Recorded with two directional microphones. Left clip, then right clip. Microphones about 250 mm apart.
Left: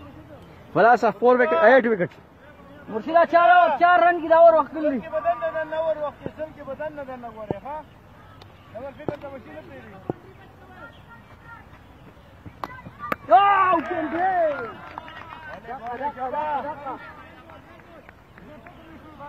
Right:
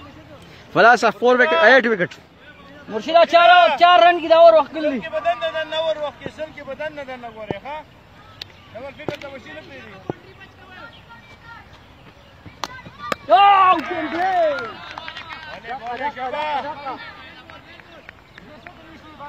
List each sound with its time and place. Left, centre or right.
0.7 s speech: centre
3.1 s a man's voice: right
5.0 s speech: right
13.0 s speech: right
15.9 s speech: right
16.6 s speech: centre